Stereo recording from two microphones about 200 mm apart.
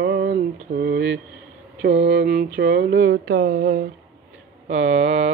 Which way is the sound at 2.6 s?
60° right (ahead or behind).